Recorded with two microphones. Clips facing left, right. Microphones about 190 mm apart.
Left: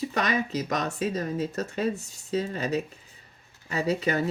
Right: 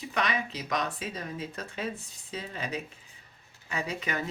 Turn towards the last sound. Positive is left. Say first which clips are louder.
# left 8 dB
turn(degrees=35)  # may be behind; listen again after turning